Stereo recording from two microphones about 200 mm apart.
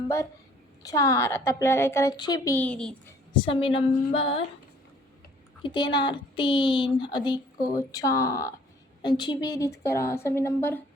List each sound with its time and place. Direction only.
0.8 s a woman's voice: 15° left (ahead or behind)
3.3 s a woman's voice: 25° left (ahead or behind)
5.6 s a woman's voice: 20° left (ahead or behind)